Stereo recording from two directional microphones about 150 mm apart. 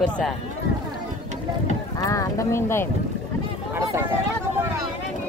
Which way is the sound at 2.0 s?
20° left (ahead or behind).